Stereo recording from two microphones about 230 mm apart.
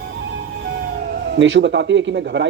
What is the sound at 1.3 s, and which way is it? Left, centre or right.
Speech, right.